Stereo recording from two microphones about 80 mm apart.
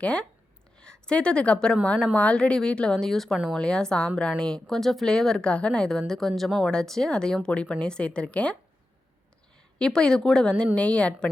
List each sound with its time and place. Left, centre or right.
0.0 s speech: centre
9.7 s speech: centre